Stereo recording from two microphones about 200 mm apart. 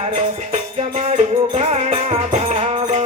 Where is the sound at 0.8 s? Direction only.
30° right (ahead or behind).